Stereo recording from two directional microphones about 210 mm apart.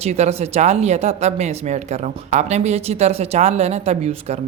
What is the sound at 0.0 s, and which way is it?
Speech, 30° right (ahead or behind).